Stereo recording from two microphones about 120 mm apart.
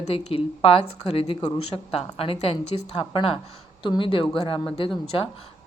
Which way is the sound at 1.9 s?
55° left (ahead or behind).